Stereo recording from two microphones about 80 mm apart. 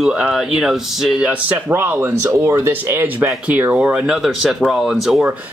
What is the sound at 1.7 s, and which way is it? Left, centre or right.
Speech, right.